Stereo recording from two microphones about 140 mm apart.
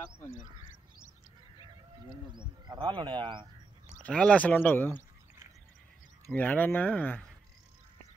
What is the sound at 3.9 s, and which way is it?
Speech, 10° left (ahead or behind).